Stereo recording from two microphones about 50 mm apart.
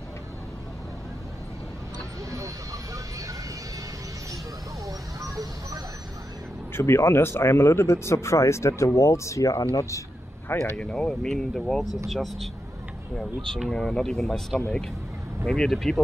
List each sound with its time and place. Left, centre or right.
6.7 s speech: left
10.8 s speech: centre
14.2 s speech: centre
15.4 s speech: centre
15.7 s speech: centre